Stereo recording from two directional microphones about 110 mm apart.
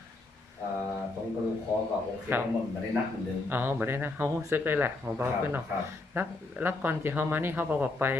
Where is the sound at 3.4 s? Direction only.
15° right (ahead or behind).